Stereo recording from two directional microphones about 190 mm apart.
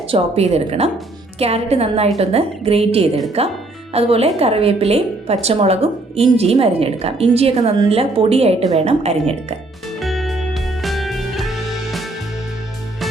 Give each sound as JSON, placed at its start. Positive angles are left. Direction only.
{"t": 0.1, "sound": "a woman's voice", "side_deg": -35}
{"t": 10.0, "sound": "music", "side_deg": 0}